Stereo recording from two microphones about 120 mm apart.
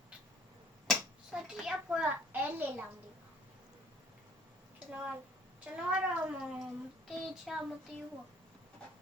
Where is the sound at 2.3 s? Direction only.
15° right (ahead or behind).